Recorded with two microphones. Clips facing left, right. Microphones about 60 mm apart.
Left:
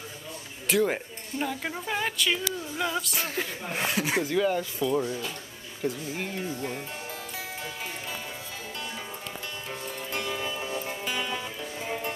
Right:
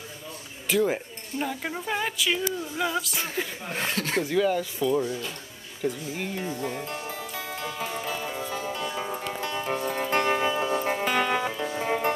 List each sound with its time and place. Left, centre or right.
0.7 s speech: centre
7.8 s music: centre
8.9 s music: right
9.2 s music: right
9.8 s music: right